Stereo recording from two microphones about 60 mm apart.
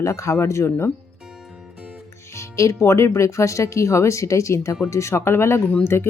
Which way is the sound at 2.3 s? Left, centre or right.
Left.